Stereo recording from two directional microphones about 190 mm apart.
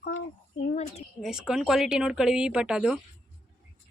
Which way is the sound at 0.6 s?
40° left (ahead or behind).